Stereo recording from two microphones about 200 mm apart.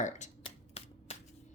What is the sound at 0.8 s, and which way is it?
Shuffling cards, 30° left (ahead or behind).